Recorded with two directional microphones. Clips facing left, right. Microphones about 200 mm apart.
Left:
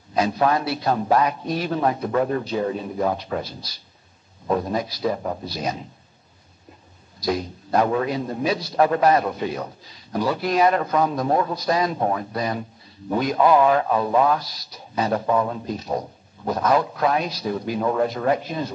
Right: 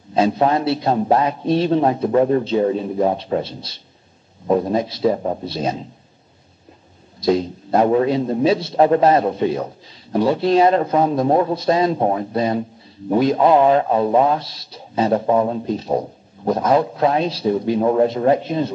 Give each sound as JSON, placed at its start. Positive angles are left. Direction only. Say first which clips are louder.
{"t": 0.1, "sound": "a man's voice", "louder": "right 4 dB", "side_deg": -25}
{"t": 7.2, "sound": "a man's voice", "louder": "right 7 dB", "side_deg": -25}